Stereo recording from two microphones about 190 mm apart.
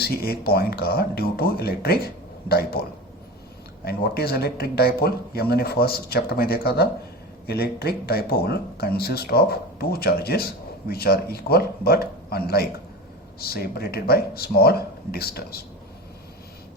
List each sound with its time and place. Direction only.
0.0 s speech: 55° left (ahead or behind)
3.8 s speech: 55° left (ahead or behind)